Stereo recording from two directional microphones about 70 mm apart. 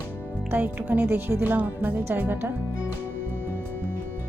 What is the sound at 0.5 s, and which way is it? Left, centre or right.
Speech, right.